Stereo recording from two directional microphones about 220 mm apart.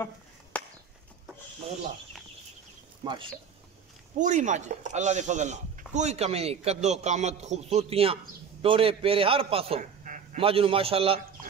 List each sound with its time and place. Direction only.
0.5 s chop: 5° left (ahead or behind)
3.0 s speech: 20° right (ahead or behind)
4.2 s a man's voice: 35° right (ahead or behind)